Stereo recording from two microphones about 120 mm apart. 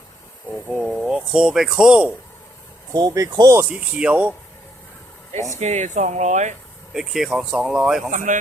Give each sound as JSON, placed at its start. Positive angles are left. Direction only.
{"t": 0.7, "sound": "speech", "side_deg": -5}
{"t": 2.9, "sound": "speech", "side_deg": -35}
{"t": 3.7, "sound": "speech", "side_deg": -10}
{"t": 5.5, "sound": "speech", "side_deg": -70}
{"t": 6.9, "sound": "speech", "side_deg": -5}
{"t": 8.1, "sound": "speech", "side_deg": -90}